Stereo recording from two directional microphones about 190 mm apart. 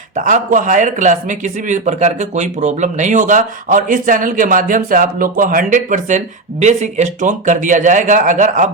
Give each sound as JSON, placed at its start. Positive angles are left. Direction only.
{"t": 0.2, "sound": "a man's voice", "side_deg": -40}